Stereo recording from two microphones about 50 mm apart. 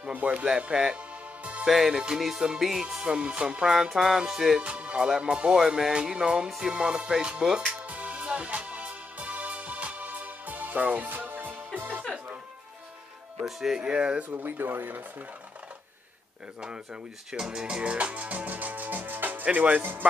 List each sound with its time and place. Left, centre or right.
0.1 s speech: right
1.4 s music: right
1.7 s music: centre
3.7 s music: centre
4.6 s speech: right
5.0 s music: centre; by 11.9 s right
13.4 s music: centre
14.3 s speech: right
16.6 s speech: centre
19.8 s speech: right